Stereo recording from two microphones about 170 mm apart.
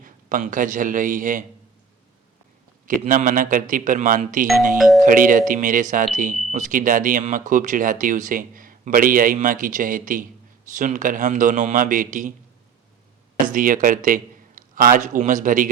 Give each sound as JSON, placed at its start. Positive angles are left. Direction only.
{"t": 0.0, "sound": "a man's voice", "side_deg": -50}
{"t": 3.1, "sound": "speech", "side_deg": -50}
{"t": 13.4, "sound": "a man's voice", "side_deg": -55}